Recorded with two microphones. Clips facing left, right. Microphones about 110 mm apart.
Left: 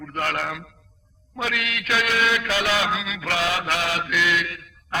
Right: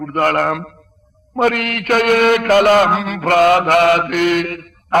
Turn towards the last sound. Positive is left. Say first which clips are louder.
# right 13 dB
turn(degrees=-50)  # may be behind; listen again after turning